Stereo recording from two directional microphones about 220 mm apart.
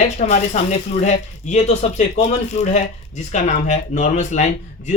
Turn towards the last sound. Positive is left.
turn(degrees=35)  # may be behind; listen again after turning